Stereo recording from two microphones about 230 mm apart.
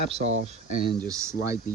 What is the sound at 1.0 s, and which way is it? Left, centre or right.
Speech, centre.